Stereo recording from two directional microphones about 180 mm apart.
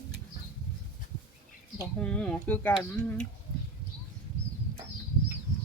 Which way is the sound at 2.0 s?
5° left (ahead or behind).